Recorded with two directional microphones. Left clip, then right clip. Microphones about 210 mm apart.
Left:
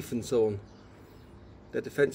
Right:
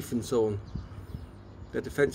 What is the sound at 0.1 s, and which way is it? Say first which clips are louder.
Speech: left 1 dB; 5° left (ahead or behind).